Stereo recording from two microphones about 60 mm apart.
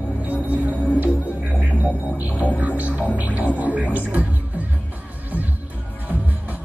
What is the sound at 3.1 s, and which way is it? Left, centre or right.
Speech, right.